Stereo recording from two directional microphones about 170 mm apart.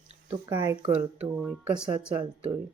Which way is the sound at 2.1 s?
30° right (ahead or behind).